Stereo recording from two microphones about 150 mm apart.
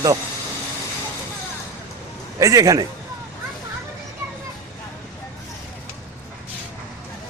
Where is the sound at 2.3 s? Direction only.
20° right (ahead or behind).